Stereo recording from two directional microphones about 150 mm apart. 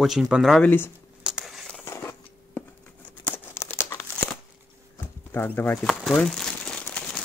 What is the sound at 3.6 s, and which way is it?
Crumpling, 15° left (ahead or behind).